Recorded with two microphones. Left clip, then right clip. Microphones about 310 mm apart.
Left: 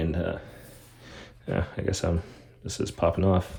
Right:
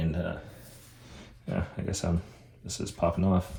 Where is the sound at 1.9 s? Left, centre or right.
Left.